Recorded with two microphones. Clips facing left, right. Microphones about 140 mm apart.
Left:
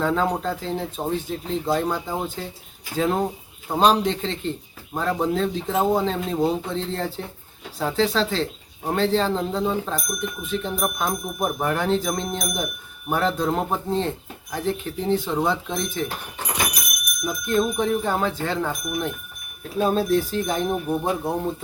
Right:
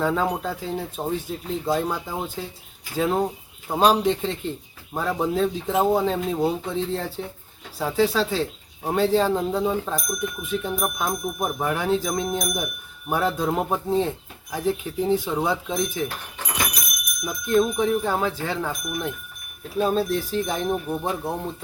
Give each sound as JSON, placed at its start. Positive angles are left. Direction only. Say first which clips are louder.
{"t": 0.0, "sound": "speech", "louder": "left 1 dB", "side_deg": -5}
{"t": 17.2, "sound": "speech", "louder": "right 1 dB", "side_deg": 0}
{"t": 20.8, "sound": "speech", "louder": "left 3 dB", "side_deg": 10}